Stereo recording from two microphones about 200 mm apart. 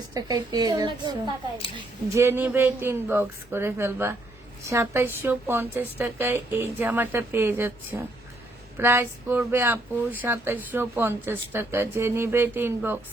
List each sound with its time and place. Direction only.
0.1 s a woman's voice: 20° right (ahead or behind)
2.1 s speech: 10° right (ahead or behind)